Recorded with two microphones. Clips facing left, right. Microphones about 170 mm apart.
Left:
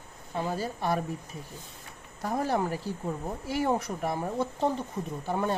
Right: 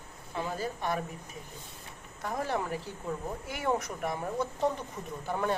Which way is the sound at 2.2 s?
35° left (ahead or behind).